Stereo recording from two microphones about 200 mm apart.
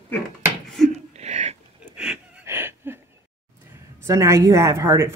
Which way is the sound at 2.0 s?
10° right (ahead or behind).